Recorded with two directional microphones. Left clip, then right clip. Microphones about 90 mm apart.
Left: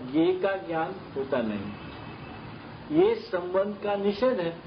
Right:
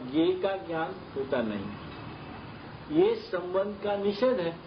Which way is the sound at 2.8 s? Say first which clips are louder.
Left 2 dB; centre (ahead or behind).